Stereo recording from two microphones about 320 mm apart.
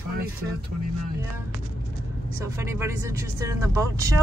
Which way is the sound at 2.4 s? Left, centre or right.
Centre.